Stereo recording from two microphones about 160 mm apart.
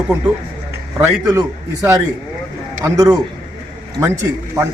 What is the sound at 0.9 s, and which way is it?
A man's voice, 20° right (ahead or behind).